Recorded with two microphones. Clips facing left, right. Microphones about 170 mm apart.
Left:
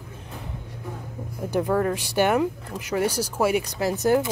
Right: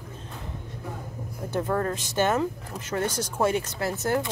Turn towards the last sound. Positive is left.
turn(degrees=15)  # may be behind; listen again after turning